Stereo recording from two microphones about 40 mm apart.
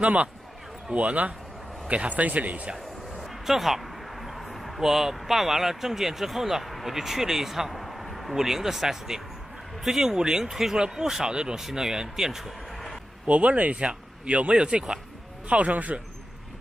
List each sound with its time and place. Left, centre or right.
0.0 s speech: right
3.4 s speech: centre
8.4 s speech: centre
12.7 s a sound: centre
13.3 s speech: right
15.4 s speech: right